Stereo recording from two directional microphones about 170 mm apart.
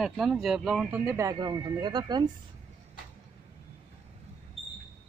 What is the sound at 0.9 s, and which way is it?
Speech, 15° right (ahead or behind).